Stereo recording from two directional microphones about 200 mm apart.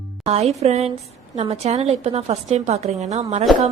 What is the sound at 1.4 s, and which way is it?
A woman's voice, 30° right (ahead or behind).